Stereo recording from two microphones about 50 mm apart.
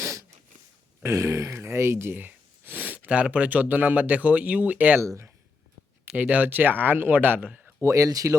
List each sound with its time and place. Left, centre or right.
0.0 s a sound: right
1.6 s speech: right
2.1 s a sound: right
3.1 s speech: right
4.9 s speech: right
6.1 s speech: right
7.8 s speech: right